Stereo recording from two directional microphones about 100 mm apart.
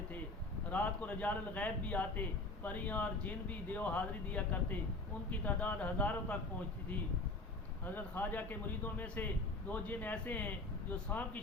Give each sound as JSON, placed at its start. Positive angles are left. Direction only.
{"t": 0.7, "sound": "speech", "side_deg": 15}
{"t": 7.9, "sound": "a man's voice", "side_deg": 20}